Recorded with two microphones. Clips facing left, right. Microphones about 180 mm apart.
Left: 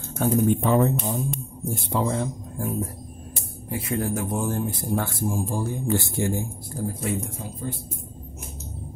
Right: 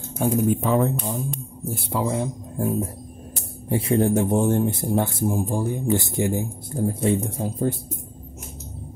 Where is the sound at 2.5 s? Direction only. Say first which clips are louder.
Right 7 dB; 25° right (ahead or behind).